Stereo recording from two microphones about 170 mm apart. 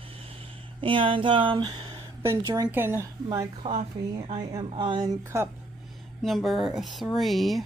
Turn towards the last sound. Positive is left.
turn(degrees=0)  # may be behind; listen again after turning